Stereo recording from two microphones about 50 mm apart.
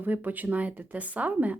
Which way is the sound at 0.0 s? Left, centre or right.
Right.